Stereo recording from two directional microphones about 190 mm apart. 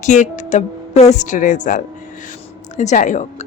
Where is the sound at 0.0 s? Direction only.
40° left (ahead or behind).